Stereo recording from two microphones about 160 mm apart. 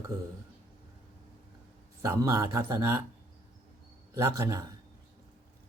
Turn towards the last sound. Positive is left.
turn(degrees=-20)  # may be behind; listen again after turning